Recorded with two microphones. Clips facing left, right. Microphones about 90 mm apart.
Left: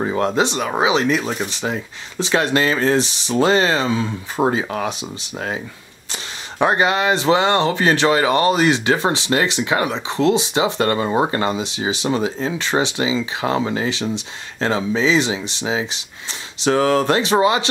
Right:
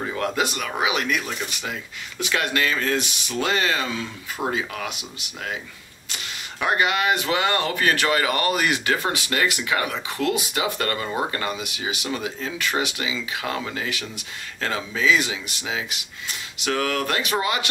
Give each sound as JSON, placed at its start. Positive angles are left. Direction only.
{"t": 0.0, "sound": "speech", "side_deg": 30}
{"t": 6.6, "sound": "speech", "side_deg": 30}